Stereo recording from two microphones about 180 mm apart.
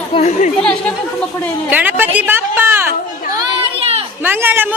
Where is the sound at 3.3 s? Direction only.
30° right (ahead or behind).